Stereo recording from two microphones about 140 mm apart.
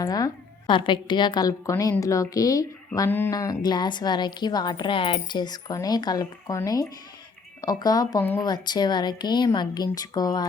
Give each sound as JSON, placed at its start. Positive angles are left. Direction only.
{"t": 0.0, "sound": "a woman's voice", "side_deg": 25}
{"t": 3.3, "sound": "a woman's voice", "side_deg": 25}